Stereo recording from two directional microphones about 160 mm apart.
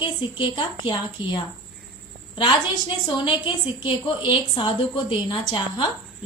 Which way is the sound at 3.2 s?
30° left (ahead or behind).